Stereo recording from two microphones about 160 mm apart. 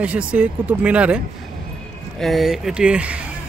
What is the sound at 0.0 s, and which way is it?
Speech, 5° right (ahead or behind).